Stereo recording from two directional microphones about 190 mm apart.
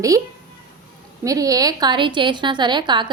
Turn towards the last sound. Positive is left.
turn(degrees=-25)  # may be behind; listen again after turning